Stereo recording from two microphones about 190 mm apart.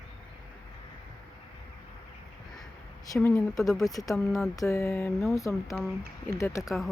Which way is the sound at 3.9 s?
20° left (ahead or behind).